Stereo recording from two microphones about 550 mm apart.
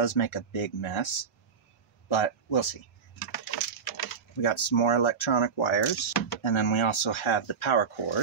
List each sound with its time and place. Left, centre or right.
0.0 s speech: left
2.0 s speech: left
3.2 s a sound: left
4.4 s speech: left